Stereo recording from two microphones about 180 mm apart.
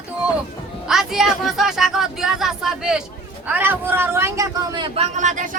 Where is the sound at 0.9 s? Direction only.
Centre (ahead or behind).